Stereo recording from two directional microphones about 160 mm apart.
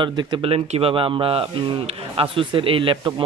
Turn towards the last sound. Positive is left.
turn(degrees=-30)  # may be behind; listen again after turning